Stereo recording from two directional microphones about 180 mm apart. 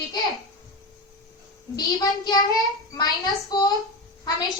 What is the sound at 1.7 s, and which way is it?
A child's voice, 20° left (ahead or behind).